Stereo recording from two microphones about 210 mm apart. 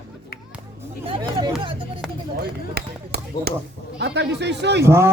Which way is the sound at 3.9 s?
55° right (ahead or behind).